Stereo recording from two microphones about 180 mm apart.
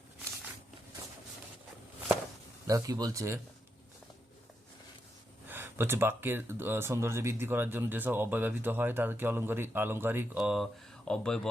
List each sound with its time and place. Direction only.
2.6 s speech: 20° right (ahead or behind)
5.5 s speech: 10° right (ahead or behind); by 11.3 s 5° left (ahead or behind)